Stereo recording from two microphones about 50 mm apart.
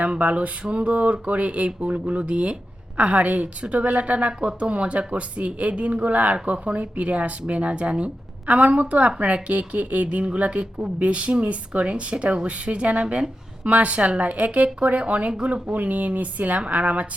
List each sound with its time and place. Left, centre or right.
0.0 s a woman's voice: right